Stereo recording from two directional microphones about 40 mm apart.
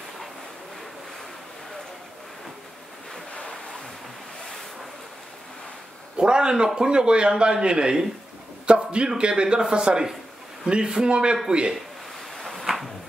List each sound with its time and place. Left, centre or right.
6.1 s a man's voice: right
8.6 s a sound: right
9.2 s a man's voice: right
12.4 s drawer open or close: centre